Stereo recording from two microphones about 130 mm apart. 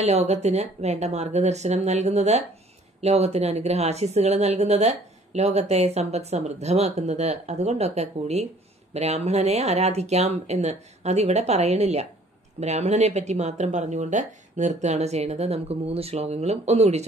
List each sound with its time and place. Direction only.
0.0 s speech: 55° right (ahead or behind)